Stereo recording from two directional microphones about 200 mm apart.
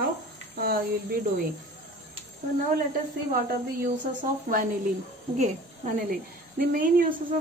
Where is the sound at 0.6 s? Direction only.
50° right (ahead or behind).